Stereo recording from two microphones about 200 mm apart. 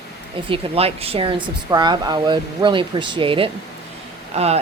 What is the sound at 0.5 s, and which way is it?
Speech, 30° right (ahead or behind).